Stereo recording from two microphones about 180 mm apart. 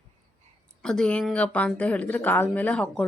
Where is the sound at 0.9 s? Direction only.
5° left (ahead or behind).